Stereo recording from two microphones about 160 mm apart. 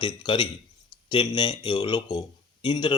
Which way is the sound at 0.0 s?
30° left (ahead or behind).